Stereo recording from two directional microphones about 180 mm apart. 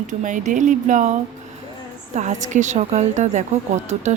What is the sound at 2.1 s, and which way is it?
Speech, 40° right (ahead or behind).